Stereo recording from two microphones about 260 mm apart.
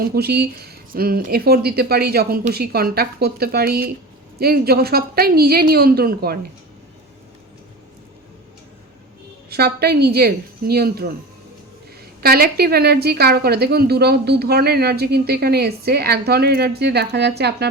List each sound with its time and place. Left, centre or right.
0.0 s a woman's voice: right
9.5 s a woman's voice: right
12.2 s a woman's voice: right